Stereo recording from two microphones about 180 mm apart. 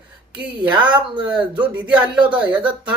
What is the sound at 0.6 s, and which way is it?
Speech, 10° right (ahead or behind).